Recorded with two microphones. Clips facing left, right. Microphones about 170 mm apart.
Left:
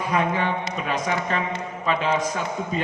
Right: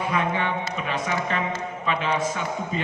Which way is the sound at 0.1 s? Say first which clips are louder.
Left 4 dB; 40° left (ahead or behind).